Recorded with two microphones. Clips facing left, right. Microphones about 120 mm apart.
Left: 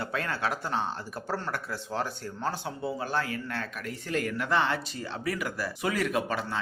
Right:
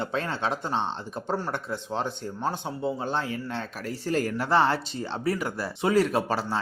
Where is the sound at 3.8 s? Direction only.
35° right (ahead or behind).